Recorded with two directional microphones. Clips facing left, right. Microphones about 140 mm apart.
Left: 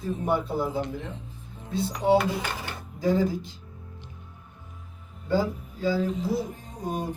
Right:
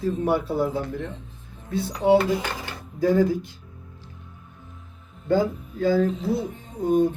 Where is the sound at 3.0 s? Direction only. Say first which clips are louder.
Right 4 dB; 55° right (ahead or behind).